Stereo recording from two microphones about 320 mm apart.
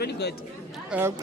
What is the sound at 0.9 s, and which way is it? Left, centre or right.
Speech, centre.